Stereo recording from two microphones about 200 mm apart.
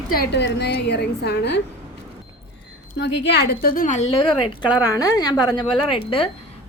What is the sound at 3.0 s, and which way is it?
A woman's voice, 60° left (ahead or behind).